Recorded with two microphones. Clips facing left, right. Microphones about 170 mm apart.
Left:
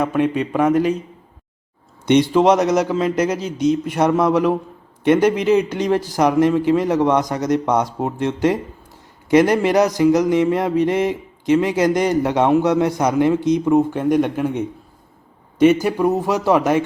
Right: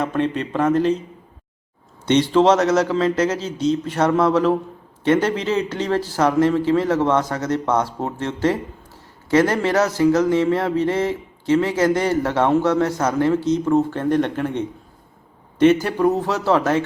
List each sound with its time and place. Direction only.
0.0 s speech: 10° left (ahead or behind)
2.0 s speech: 15° left (ahead or behind)